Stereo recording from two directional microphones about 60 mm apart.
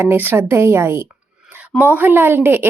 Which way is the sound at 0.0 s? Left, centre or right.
Right.